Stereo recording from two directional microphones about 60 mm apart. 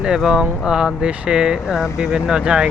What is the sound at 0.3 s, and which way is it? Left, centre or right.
Speech, centre.